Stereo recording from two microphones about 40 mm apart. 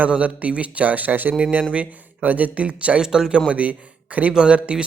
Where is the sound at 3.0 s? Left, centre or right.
Centre.